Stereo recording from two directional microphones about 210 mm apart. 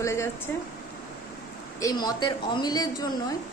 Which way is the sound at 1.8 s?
20° left (ahead or behind).